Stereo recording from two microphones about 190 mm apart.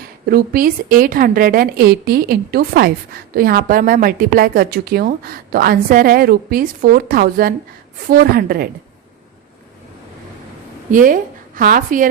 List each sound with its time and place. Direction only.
0.3 s a woman's voice: 50° right (ahead or behind)
10.9 s a woman's voice: 45° right (ahead or behind)